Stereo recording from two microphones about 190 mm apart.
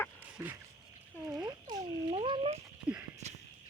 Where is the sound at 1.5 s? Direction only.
20° right (ahead or behind).